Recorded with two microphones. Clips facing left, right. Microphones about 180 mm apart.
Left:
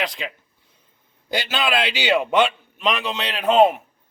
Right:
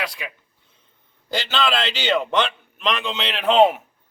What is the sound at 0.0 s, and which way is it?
Speech, 20° left (ahead or behind).